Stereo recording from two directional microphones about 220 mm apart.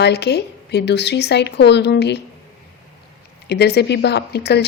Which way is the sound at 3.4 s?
50° left (ahead or behind).